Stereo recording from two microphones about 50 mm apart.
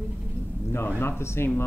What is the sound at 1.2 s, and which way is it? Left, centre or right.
Speech, left.